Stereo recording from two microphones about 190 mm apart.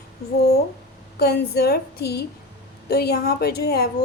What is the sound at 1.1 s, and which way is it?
A woman's voice, 60° left (ahead or behind).